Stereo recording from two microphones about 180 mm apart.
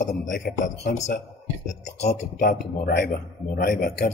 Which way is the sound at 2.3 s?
50° left (ahead or behind).